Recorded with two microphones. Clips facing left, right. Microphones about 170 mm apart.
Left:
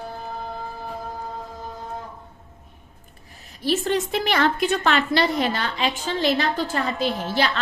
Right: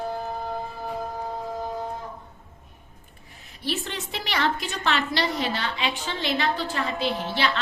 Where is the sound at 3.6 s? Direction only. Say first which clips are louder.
Left 9 dB; 45° left (ahead or behind).